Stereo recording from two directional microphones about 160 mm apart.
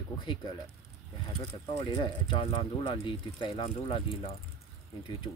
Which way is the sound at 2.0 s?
30° left (ahead or behind).